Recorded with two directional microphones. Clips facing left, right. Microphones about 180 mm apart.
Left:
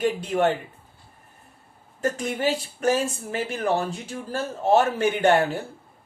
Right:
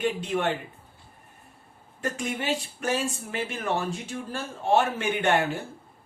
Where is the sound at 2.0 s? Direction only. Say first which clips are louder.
Left 5 dB; 40° left (ahead or behind).